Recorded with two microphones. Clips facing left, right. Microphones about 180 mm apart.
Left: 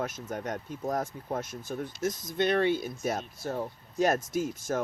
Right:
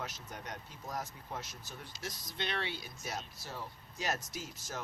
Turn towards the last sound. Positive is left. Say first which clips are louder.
# left 14 dB
turn(degrees=50)  # may be behind; listen again after turning